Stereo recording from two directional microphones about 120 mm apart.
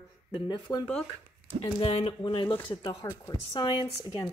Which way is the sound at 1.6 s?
50° left (ahead or behind).